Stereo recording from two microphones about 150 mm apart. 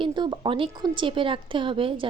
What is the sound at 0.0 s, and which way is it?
A woman's voice, 30° right (ahead or behind).